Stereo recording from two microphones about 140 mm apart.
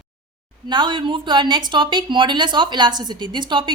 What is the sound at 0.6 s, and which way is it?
Speech, 35° right (ahead or behind).